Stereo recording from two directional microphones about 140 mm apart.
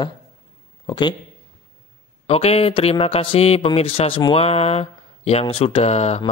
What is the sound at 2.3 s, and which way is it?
Speech, 45° left (ahead or behind).